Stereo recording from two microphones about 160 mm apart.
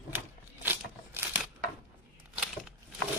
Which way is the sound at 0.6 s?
10° right (ahead or behind).